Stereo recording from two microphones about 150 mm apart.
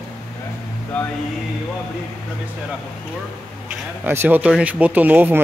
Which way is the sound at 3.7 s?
15° right (ahead or behind).